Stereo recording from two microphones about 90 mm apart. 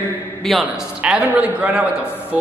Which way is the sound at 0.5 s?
Centre (ahead or behind).